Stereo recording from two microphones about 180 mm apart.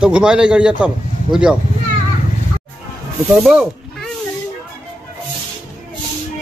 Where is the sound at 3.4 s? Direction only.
Centre (ahead or behind).